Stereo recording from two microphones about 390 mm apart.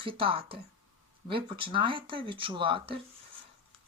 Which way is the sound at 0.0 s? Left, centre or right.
Centre.